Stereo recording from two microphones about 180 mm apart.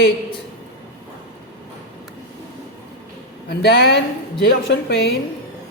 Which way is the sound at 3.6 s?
75° left (ahead or behind).